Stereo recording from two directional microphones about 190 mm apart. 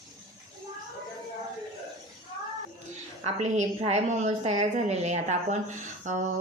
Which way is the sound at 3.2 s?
40° right (ahead or behind).